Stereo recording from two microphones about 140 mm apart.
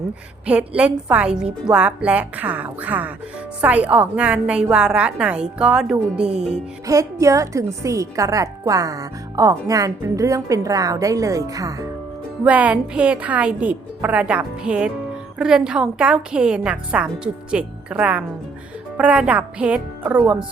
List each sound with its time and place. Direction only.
0.4 s a woman's voice: 10° right (ahead or behind)
6.8 s a woman's voice: 25° right (ahead or behind)
12.5 s a woman's voice: 10° right (ahead or behind)